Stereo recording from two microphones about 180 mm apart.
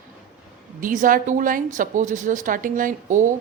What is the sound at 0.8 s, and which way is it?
A woman's voice, 50° right (ahead or behind).